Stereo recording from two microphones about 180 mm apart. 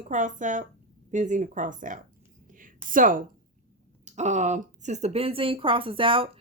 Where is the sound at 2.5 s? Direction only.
50° right (ahead or behind).